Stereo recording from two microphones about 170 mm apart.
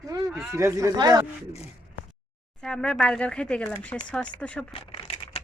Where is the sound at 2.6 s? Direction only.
5° left (ahead or behind).